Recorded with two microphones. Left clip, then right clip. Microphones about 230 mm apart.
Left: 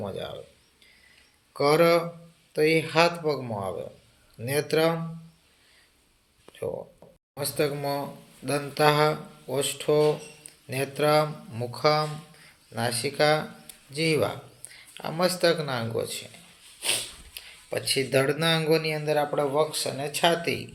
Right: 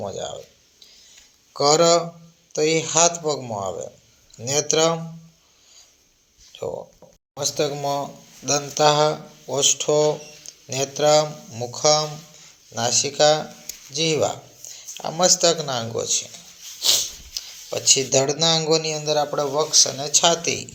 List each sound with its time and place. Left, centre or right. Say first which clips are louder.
0.0 s speech: right 5 dB; centre
1.5 s speech: right 4 dB; centre
6.6 s speech: right 3 dB; centre
16.8 s speech: right 9 dB; centre